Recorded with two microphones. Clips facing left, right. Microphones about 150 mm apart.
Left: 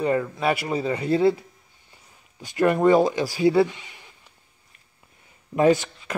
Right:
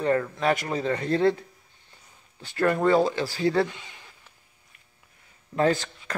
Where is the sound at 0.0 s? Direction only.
10° left (ahead or behind).